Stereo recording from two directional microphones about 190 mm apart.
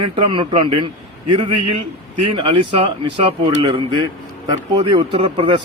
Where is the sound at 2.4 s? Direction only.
30° right (ahead or behind).